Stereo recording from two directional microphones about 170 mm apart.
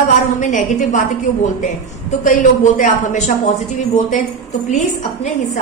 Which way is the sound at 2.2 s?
50° left (ahead or behind).